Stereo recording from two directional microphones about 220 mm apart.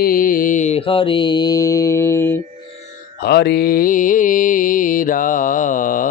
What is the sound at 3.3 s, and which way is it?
Mantra, 45° left (ahead or behind).